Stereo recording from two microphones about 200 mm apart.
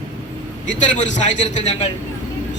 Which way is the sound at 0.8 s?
35° left (ahead or behind).